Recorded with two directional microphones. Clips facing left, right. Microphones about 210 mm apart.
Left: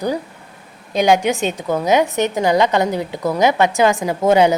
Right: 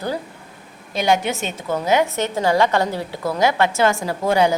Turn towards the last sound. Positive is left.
turn(degrees=20)  # may be behind; listen again after turning